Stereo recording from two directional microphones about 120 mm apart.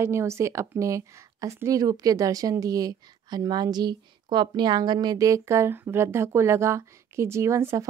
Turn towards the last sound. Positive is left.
turn(degrees=-25)  # may be behind; listen again after turning